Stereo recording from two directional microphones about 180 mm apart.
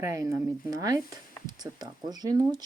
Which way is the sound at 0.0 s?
15° right (ahead or behind).